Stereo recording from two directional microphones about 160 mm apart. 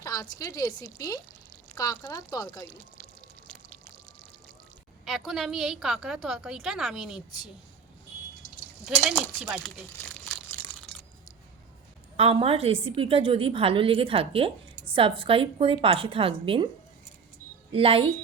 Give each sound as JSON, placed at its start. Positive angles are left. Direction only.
{"t": 0.0, "sound": "a woman's voice", "side_deg": 20}
{"t": 5.0, "sound": "a woman's voice", "side_deg": 0}
{"t": 8.8, "sound": "a woman's voice", "side_deg": -5}
{"t": 12.1, "sound": "a woman's voice", "side_deg": -40}
{"t": 17.7, "sound": "a woman's voice", "side_deg": -35}